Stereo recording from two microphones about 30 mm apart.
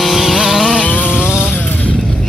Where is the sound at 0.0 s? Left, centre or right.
Centre.